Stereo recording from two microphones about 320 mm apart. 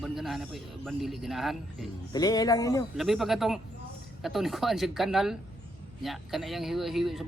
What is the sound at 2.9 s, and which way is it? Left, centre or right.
A man's voice, centre.